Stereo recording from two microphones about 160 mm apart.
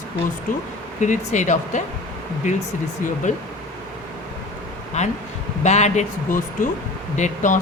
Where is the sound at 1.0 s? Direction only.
50° left (ahead or behind).